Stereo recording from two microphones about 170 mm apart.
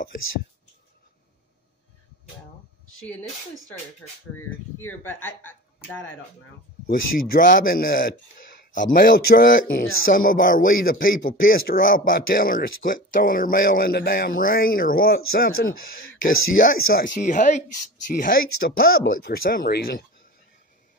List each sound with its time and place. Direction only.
4.4 s speech: 15° left (ahead or behind)
6.9 s speech: 50° left (ahead or behind)
18.2 s speech: 60° left (ahead or behind)